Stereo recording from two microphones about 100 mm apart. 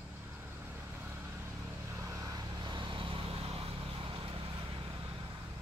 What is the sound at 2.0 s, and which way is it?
Vehicle, 35° right (ahead or behind).